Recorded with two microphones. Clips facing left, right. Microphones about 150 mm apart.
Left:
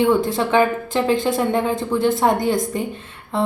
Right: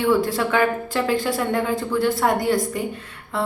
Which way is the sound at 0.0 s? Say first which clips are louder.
Left 2 dB; 20° left (ahead or behind).